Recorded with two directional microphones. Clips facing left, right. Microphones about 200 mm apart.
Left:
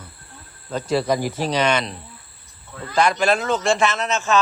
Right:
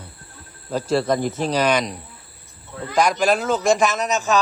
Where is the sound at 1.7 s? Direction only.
10° right (ahead or behind).